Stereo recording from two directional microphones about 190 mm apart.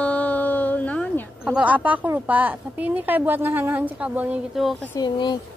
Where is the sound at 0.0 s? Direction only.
5° left (ahead or behind).